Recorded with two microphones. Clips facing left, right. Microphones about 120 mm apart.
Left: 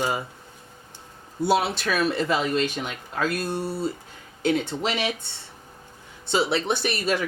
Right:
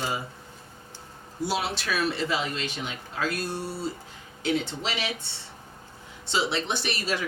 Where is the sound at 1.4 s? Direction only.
55° left (ahead or behind).